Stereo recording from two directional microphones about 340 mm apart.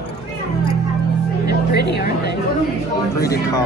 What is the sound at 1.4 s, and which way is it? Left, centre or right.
Music, left.